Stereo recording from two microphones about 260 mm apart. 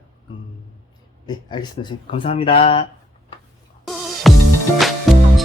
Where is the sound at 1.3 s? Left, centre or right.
Centre.